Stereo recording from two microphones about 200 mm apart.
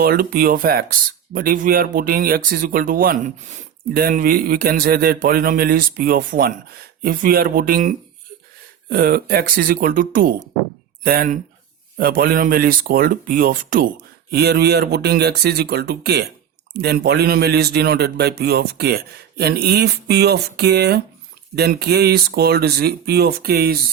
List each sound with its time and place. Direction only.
0.0 s speech: 50° right (ahead or behind)